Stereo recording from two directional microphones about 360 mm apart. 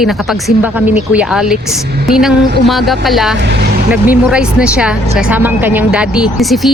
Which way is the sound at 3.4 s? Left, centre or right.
Right.